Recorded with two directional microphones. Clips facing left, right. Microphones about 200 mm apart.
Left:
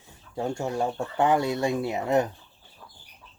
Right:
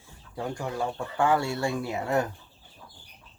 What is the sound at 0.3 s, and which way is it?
Speech, 25° left (ahead or behind).